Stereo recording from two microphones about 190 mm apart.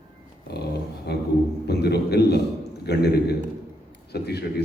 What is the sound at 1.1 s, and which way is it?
A man's voice, 60° left (ahead or behind).